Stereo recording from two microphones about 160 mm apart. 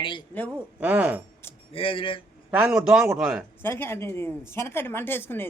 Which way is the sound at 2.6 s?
5° right (ahead or behind).